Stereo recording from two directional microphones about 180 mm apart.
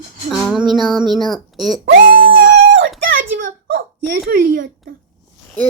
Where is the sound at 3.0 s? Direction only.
50° right (ahead or behind).